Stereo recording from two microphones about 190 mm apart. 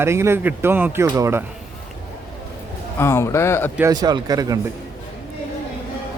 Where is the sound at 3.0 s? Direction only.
15° left (ahead or behind).